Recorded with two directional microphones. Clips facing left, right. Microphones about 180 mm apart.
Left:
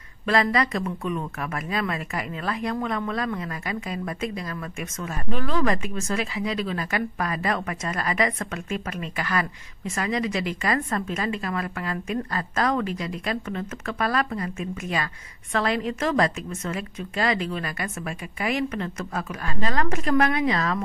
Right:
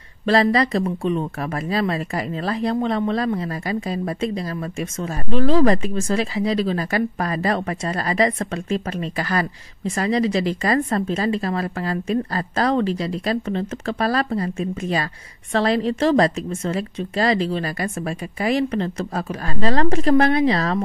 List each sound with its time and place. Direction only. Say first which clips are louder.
0.3 s speech: right 5 dB; 35° right (ahead or behind)